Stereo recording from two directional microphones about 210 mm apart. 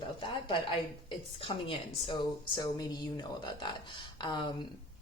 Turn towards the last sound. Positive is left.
turn(degrees=20)  # may be behind; listen again after turning